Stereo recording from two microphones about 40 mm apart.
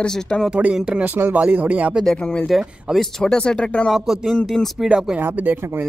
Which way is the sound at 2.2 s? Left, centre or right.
Left.